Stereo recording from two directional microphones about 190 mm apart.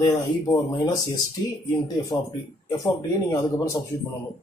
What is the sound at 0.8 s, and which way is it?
Speech, 20° left (ahead or behind).